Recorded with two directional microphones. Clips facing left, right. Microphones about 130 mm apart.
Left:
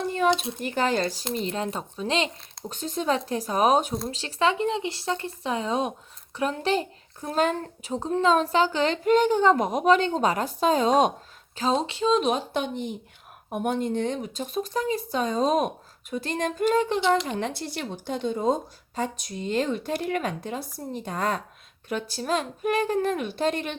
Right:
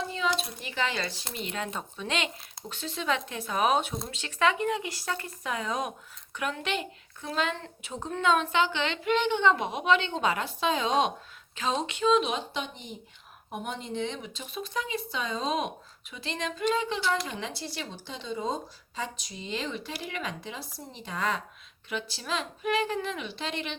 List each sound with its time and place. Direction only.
0.0 s a sound: 55° left (ahead or behind)
0.6 s speech: 45° left (ahead or behind)
17.0 s speech: 20° left (ahead or behind)
17.2 s speech: 50° left (ahead or behind)